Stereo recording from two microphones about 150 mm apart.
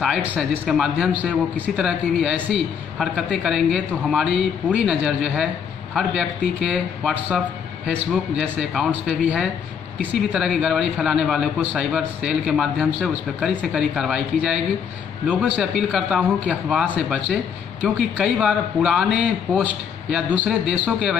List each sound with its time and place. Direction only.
0.2 s a man's voice: 5° right (ahead or behind)